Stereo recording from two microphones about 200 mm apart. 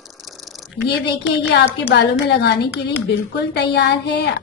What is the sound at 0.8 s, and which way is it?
A woman's voice, 55° left (ahead or behind).